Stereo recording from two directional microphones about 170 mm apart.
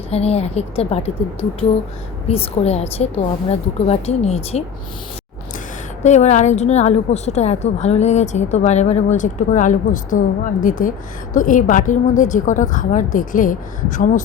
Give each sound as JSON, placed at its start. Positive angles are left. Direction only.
{"t": 0.1, "sound": "a woman's voice", "side_deg": 40}
{"t": 6.0, "sound": "a woman's voice", "side_deg": 45}